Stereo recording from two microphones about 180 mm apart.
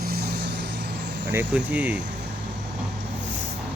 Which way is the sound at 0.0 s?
60° right (ahead or behind).